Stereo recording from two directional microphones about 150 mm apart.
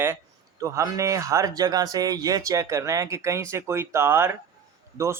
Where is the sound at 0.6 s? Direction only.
20° right (ahead or behind).